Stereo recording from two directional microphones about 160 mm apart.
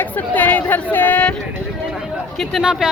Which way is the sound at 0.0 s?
10° left (ahead or behind).